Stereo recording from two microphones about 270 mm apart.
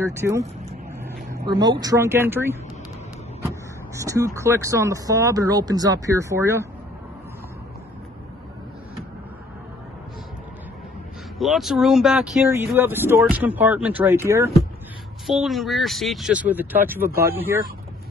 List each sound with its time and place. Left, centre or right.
0.0 s speech: centre
11.3 s speech: centre